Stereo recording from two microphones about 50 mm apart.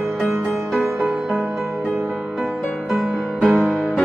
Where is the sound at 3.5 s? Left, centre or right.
Left.